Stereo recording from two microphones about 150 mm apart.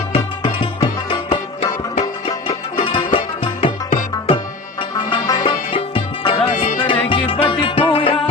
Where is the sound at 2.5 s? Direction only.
35° left (ahead or behind).